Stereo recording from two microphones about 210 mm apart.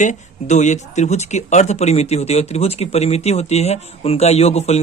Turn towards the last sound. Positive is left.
turn(degrees=30)  # may be behind; listen again after turning